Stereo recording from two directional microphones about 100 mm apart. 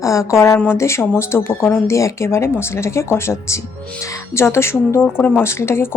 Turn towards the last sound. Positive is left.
turn(degrees=25)  # may be behind; listen again after turning